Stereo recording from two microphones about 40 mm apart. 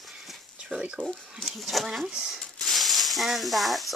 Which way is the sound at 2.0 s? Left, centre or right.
Centre.